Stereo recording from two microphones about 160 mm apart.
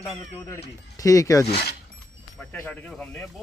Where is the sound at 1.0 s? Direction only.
20° left (ahead or behind).